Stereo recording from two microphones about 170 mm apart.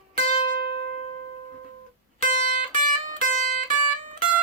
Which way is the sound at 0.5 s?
70° right (ahead or behind).